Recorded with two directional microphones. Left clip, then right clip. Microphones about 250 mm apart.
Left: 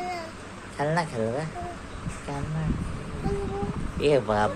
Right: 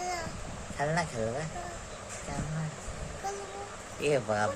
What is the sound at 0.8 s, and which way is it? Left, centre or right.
Speech, centre.